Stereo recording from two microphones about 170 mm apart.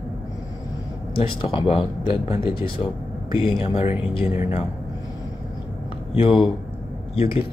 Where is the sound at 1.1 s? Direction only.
30° left (ahead or behind).